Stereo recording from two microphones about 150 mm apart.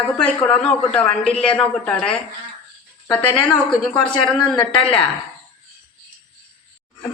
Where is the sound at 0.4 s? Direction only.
5° left (ahead or behind).